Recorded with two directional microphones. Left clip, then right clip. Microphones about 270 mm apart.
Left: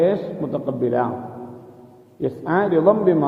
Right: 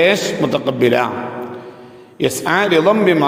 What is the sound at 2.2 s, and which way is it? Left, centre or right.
Speech, right.